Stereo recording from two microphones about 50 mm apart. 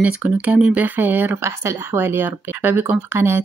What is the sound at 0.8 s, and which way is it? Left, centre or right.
Speech, right.